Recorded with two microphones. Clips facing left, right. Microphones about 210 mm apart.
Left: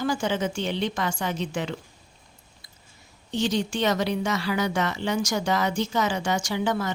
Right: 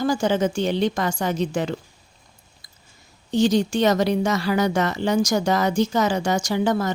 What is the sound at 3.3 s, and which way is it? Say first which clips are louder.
Speech: right 7 dB; 40° right (ahead or behind).